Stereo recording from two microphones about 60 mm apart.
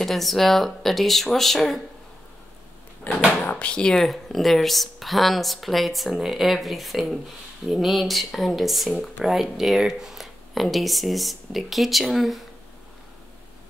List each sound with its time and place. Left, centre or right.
0.0 s speech: centre
3.1 s speech: left
4.0 s speech: centre